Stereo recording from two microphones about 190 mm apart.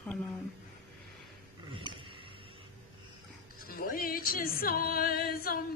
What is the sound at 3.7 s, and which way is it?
Music, 50° left (ahead or behind).